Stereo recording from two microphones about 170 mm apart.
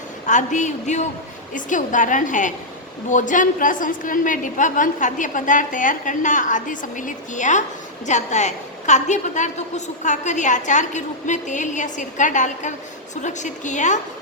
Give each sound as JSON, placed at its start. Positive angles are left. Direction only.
{"t": 0.3, "sound": "a woman's voice", "side_deg": 45}